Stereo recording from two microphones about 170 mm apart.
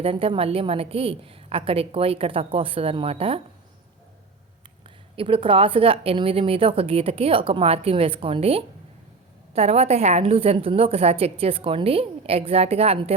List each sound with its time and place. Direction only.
0.0 s a woman's voice: 35° right (ahead or behind)
5.1 s a woman's voice: 35° right (ahead or behind)